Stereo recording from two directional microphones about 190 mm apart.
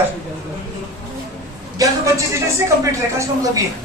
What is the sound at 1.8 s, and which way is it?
Speech, 15° right (ahead or behind).